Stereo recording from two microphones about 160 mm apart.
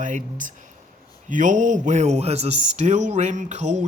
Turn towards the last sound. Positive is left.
turn(degrees=-45)  # may be behind; listen again after turning